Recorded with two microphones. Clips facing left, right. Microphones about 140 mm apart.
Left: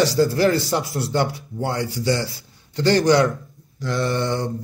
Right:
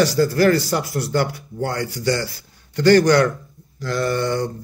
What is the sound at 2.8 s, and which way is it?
A man's voice, 20° left (ahead or behind).